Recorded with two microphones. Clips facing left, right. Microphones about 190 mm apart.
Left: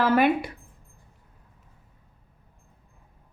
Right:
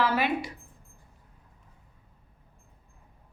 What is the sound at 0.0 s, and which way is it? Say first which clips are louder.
Speech: left 6 dB; 50° left (ahead or behind).